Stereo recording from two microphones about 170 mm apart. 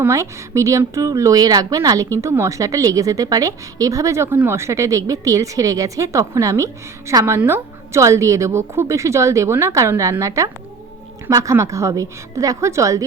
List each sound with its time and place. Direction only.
0.0 s a woman's voice: 15° right (ahead or behind)